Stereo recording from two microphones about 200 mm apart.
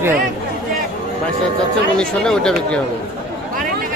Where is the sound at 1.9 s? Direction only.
5° left (ahead or behind).